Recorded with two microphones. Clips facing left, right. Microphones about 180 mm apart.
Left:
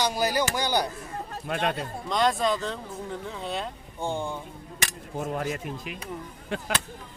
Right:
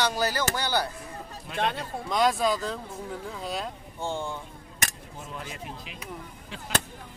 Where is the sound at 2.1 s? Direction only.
5° right (ahead or behind).